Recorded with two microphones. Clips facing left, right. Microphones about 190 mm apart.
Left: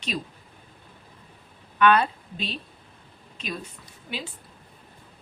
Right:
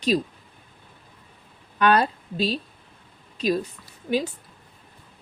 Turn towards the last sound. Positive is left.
turn(degrees=-45)  # may be behind; listen again after turning